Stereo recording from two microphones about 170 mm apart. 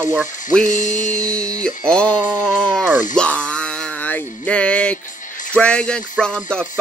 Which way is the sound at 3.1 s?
5° left (ahead or behind).